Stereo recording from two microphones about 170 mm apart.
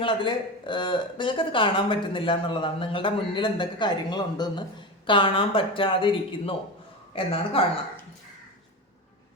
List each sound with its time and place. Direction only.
0.0 s speech: 30° left (ahead or behind)